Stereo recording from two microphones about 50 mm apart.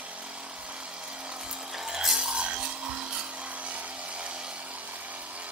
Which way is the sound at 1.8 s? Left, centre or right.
Centre.